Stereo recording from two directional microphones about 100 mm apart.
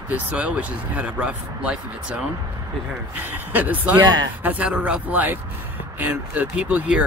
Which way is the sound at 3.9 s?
45° right (ahead or behind).